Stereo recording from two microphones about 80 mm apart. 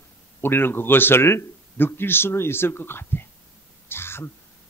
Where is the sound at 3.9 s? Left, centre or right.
Left.